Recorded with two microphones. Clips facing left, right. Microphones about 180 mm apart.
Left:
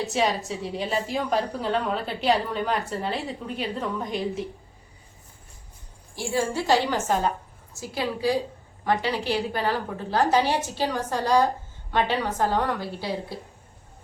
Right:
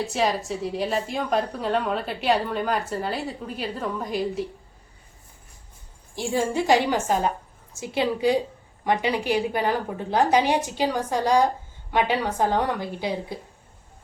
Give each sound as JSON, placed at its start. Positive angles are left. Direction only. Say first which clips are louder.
{"t": 0.0, "sound": "a woman's voice", "louder": "even", "side_deg": 0}
{"t": 6.1, "sound": "a woman's voice", "louder": "right 2 dB", "side_deg": -20}